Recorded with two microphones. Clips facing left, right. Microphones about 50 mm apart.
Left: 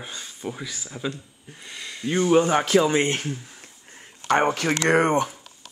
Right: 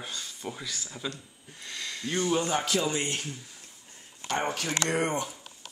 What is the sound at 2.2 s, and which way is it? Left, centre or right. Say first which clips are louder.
Speech: left 9 dB; left.